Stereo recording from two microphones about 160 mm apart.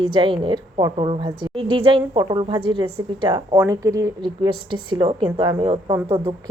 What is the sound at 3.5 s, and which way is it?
A woman's voice, 20° right (ahead or behind).